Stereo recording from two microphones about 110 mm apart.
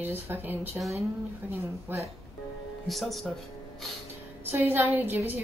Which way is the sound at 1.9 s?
20° right (ahead or behind).